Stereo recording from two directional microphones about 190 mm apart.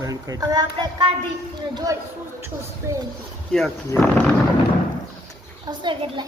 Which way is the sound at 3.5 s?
5° left (ahead or behind).